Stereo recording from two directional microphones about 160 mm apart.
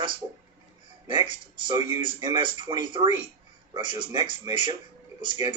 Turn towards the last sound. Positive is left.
turn(degrees=-30)  # may be behind; listen again after turning